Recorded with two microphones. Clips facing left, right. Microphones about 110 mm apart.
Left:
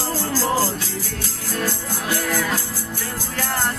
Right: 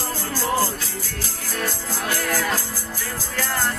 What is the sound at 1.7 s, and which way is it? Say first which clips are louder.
Music: left 1 dB; 20° left (ahead or behind).